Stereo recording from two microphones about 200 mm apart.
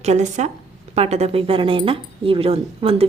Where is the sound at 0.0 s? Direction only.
35° right (ahead or behind).